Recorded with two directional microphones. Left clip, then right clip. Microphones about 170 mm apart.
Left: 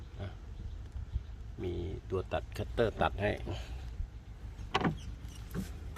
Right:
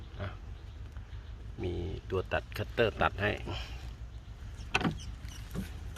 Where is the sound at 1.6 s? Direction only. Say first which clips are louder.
Right 1 dB; 5° left (ahead or behind).